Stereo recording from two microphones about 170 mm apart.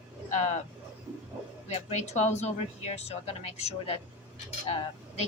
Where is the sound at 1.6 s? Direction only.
40° left (ahead or behind).